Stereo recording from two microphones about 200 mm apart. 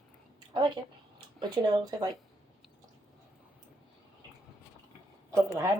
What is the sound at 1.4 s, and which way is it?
Speech, 20° right (ahead or behind).